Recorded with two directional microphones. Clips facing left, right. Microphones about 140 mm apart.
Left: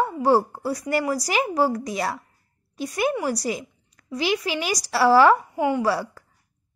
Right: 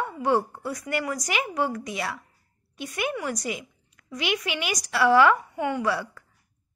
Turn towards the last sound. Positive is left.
turn(degrees=35)  # may be behind; listen again after turning